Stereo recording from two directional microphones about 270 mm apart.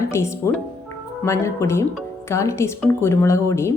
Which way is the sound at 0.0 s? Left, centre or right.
Centre.